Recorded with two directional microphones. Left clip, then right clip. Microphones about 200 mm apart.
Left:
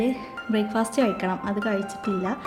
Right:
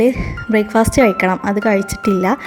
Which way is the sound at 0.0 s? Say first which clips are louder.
Right 11 dB; 35° right (ahead or behind).